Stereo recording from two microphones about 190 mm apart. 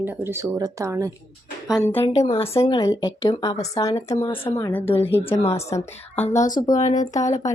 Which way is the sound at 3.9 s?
35° left (ahead or behind).